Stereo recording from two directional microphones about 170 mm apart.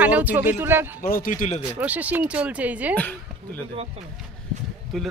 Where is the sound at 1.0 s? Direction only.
55° left (ahead or behind).